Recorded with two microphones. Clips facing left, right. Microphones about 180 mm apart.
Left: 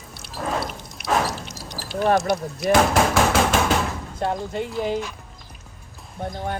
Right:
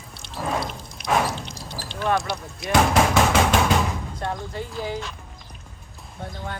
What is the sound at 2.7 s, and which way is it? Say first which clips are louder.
Speech: left 1 dB; centre (ahead or behind).